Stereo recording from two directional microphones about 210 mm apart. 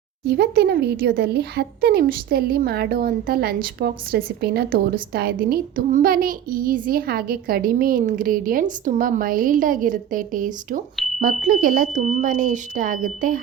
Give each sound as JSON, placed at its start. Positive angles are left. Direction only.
{"t": 0.3, "sound": "speech", "side_deg": -50}